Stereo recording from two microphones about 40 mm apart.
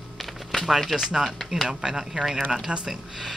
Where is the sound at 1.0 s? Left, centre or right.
Centre.